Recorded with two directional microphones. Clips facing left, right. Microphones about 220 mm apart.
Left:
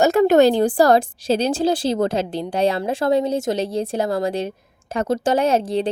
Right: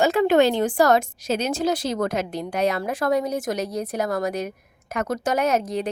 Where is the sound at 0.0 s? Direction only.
45° left (ahead or behind).